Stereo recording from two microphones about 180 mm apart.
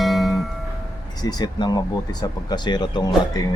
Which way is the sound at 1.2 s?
20° left (ahead or behind).